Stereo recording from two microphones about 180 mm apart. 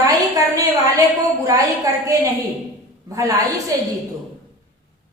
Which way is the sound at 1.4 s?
20° right (ahead or behind).